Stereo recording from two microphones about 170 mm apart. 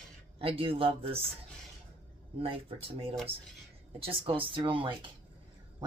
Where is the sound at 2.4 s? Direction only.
35° right (ahead or behind).